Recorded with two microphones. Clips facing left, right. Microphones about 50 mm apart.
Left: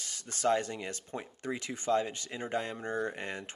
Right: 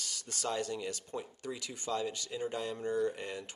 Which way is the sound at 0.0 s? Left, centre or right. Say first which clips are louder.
Left 7 dB; left.